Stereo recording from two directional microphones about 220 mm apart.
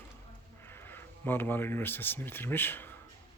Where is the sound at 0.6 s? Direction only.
10° left (ahead or behind).